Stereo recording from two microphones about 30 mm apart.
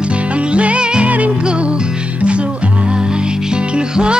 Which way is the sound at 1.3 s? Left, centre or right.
Right.